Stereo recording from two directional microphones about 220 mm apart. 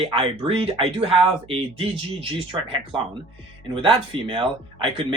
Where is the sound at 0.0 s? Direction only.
25° right (ahead or behind).